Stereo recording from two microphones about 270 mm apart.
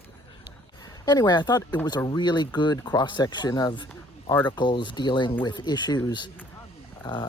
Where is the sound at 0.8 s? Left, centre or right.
Centre.